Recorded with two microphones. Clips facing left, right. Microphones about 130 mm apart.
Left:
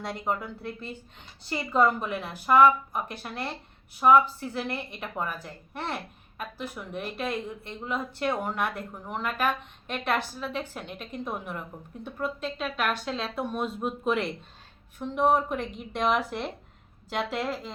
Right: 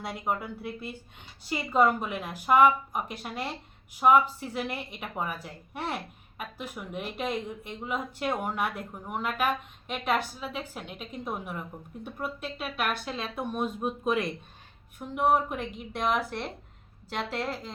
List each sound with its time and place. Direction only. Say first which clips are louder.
0.0 s a woman's voice: left 1 dB; 5° right (ahead or behind)